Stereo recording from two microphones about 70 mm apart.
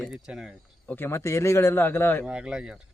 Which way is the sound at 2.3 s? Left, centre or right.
Centre.